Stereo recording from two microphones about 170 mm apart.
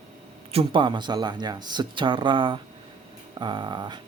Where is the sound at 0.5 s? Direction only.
30° right (ahead or behind).